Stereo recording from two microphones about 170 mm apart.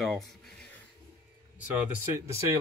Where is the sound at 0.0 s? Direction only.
Centre (ahead or behind).